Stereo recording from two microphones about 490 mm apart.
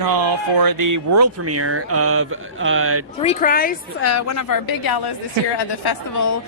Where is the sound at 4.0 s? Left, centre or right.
Left.